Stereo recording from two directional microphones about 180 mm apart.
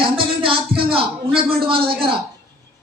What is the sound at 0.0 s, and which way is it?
Music, 30° right (ahead or behind).